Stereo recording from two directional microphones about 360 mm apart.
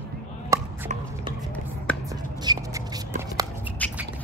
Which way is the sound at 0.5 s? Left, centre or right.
Centre.